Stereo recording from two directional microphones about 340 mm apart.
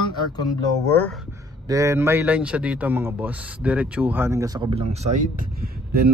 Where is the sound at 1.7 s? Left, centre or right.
Centre; by 6.0 s right.